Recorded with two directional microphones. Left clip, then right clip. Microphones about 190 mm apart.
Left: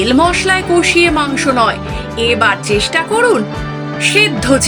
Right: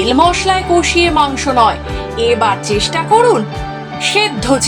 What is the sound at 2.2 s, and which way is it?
Speech, 15° left (ahead or behind).